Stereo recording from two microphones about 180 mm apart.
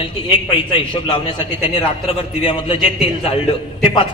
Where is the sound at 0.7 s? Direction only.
25° left (ahead or behind).